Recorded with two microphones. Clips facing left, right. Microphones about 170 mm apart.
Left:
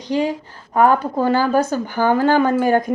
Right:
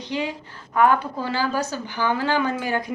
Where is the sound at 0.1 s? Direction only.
40° left (ahead or behind).